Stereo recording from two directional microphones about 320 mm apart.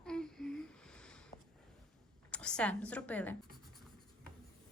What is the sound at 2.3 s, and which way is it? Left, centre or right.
A woman's voice, centre.